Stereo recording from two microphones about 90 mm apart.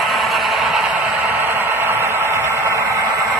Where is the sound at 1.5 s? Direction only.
25° right (ahead or behind).